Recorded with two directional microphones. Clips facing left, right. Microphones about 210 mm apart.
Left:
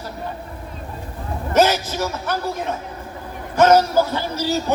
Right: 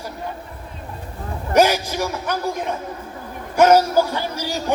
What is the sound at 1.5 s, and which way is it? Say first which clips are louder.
Speech: right 1 dB; 10° right (ahead or behind).